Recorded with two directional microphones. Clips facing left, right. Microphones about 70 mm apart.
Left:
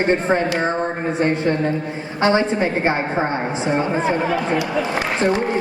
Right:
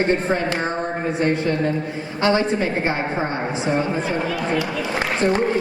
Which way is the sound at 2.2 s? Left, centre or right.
Left.